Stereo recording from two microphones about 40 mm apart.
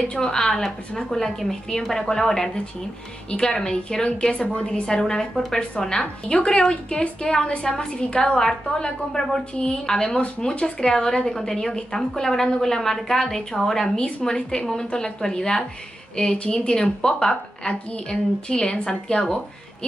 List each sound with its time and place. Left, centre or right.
0.1 s a woman's voice: centre